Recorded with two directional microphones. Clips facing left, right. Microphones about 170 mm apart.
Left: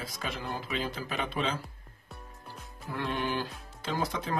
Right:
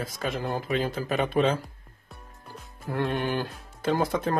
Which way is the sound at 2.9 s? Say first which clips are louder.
Right 5 dB; 50° right (ahead or behind).